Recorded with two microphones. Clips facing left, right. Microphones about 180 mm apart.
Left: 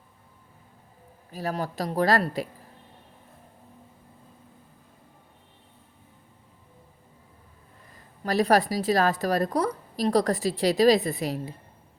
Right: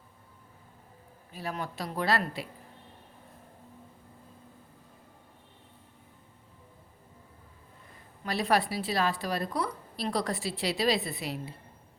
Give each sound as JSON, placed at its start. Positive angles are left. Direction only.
{"t": 1.3, "sound": "a woman's voice", "side_deg": 40}
{"t": 8.2, "sound": "a woman's voice", "side_deg": 40}